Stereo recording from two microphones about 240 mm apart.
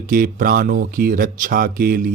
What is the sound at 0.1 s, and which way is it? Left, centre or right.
Speech, right.